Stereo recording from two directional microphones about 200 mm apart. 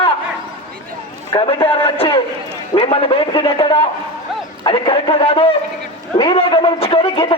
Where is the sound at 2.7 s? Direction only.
30° left (ahead or behind).